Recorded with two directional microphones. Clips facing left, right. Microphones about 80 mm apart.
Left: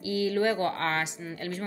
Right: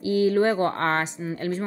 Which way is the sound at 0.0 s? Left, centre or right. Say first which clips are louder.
Right 6 dB; right.